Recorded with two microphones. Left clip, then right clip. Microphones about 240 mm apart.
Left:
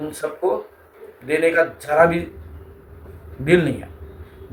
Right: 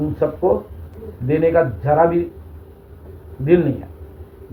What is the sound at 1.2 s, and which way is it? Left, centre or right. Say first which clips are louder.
Speech: right 1 dB; left.